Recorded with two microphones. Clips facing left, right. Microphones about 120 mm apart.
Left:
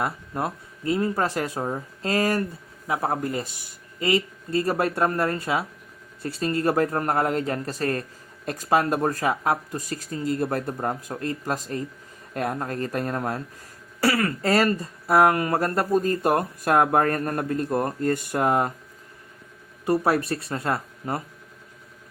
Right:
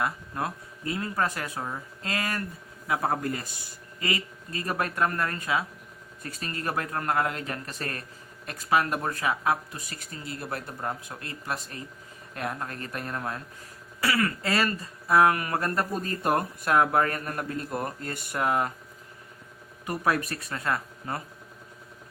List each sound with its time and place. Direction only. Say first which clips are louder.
0.0 s speech: left 3 dB; 30° left (ahead or behind)
19.8 s speech: left 6 dB; 30° left (ahead or behind)